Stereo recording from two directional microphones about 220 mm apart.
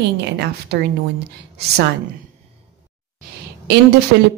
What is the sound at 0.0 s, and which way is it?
Speech, 50° right (ahead or behind).